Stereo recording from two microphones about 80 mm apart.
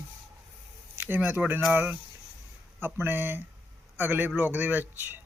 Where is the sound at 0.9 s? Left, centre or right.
Right.